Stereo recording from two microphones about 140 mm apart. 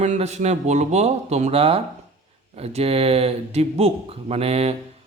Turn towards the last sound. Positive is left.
turn(degrees=-45)  # may be behind; listen again after turning